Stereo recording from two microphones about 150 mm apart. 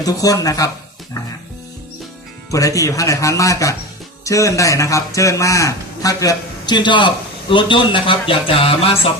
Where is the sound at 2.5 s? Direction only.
20° left (ahead or behind).